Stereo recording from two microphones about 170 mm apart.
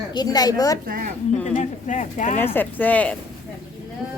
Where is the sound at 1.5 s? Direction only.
45° left (ahead or behind).